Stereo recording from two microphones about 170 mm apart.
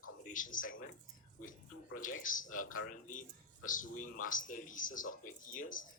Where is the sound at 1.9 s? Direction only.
50° left (ahead or behind).